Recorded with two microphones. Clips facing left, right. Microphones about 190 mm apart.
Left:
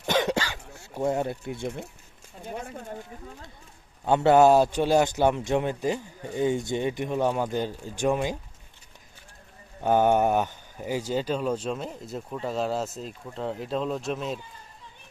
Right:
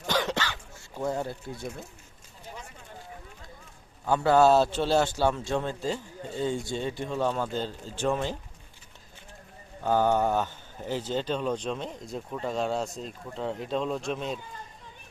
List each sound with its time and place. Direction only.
0.1 s a sound: 20° left (ahead or behind)
0.6 s dog: 65° left (ahead or behind)
0.9 s speech: 20° left (ahead or behind)
2.4 s a sound: 55° left (ahead or behind)
4.0 s a man's voice: 25° left (ahead or behind)
9.8 s speech: 20° left (ahead or behind); by 14.3 s centre (ahead or behind)